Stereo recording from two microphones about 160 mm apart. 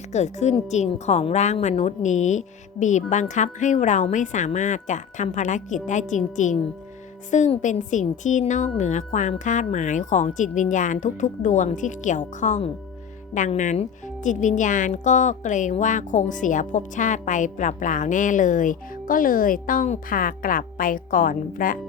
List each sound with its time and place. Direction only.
0.1 s a woman's voice: 45° left (ahead or behind)